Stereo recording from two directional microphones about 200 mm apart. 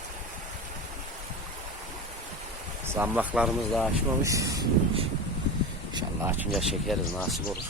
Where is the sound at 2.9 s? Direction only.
10° right (ahead or behind).